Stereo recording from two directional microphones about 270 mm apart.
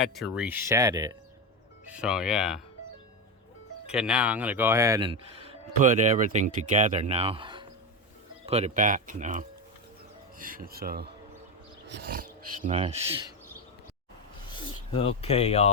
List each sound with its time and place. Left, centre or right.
0.0 s speech: centre
3.8 s speech: centre; by 13.0 s right
14.5 s speech: centre